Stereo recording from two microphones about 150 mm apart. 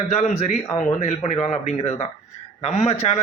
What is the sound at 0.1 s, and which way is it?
A man's voice, 50° left (ahead or behind).